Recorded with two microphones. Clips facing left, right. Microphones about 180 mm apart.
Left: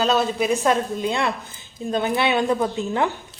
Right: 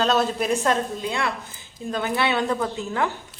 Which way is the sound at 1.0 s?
20° left (ahead or behind).